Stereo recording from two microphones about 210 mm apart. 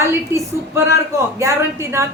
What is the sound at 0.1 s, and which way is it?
A woman's voice, 15° right (ahead or behind).